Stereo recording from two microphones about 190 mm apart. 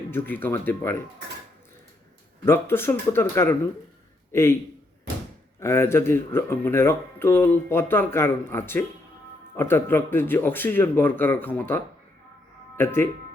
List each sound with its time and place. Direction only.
0.1 s speech: 10° left (ahead or behind)
2.4 s speech: 15° left (ahead or behind)
5.5 s speech: 15° left (ahead or behind)